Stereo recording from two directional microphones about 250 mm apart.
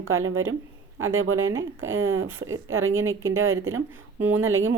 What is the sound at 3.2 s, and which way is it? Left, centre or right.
Speech, centre.